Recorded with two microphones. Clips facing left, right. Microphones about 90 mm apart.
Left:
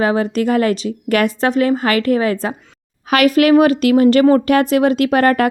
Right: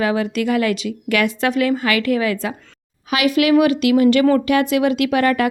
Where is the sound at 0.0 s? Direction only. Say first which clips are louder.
Left 3 dB; 35° left (ahead or behind).